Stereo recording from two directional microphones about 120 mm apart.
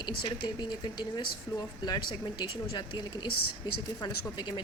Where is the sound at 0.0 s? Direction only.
35° left (ahead or behind).